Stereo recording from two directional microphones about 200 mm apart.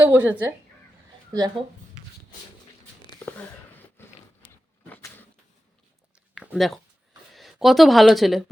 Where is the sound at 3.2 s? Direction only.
5° left (ahead or behind).